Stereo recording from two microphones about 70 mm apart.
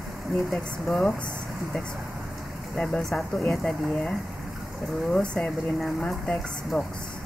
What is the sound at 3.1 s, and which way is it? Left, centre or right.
Speech, centre.